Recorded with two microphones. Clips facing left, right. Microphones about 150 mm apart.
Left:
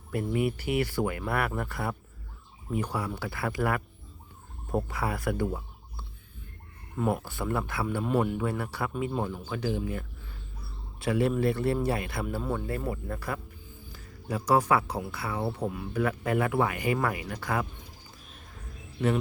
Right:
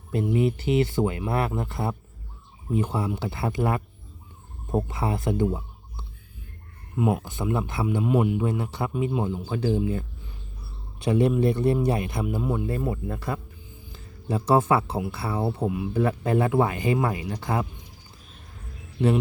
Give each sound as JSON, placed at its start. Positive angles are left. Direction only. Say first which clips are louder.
{"t": 0.1, "sound": "speech", "louder": "right 5 dB", "side_deg": -25}
{"t": 7.0, "sound": "speech", "louder": "right 4 dB", "side_deg": -15}
{"t": 7.9, "sound": "speech", "louder": "right 5 dB", "side_deg": -10}
{"t": 11.0, "sound": "speech", "louder": "right 4 dB", "side_deg": -20}